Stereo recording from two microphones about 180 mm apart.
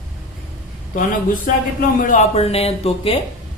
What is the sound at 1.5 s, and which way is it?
Speech, 50° left (ahead or behind).